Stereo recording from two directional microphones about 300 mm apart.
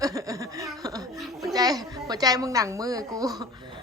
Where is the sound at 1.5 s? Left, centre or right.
Centre.